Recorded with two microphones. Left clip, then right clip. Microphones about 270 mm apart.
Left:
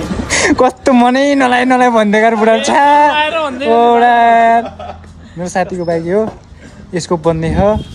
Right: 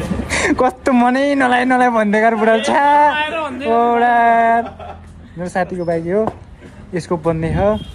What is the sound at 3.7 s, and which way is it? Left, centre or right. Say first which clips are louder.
Speech: left 5 dB; centre.